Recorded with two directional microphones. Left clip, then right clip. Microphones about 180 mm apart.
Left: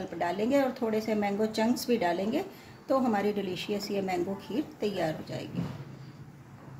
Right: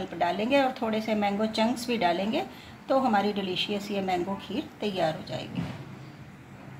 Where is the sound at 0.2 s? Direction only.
25° left (ahead or behind).